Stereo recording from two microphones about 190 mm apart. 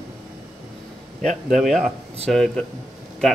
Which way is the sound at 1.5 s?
Centre (ahead or behind).